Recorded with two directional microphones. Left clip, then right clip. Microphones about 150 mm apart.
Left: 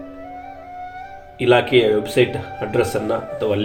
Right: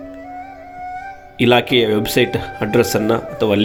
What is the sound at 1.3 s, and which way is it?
Speech, 90° right.